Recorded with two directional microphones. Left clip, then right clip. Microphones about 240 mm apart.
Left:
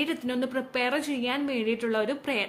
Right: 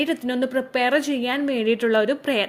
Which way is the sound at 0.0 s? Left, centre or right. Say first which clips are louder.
Right 6 dB; centre.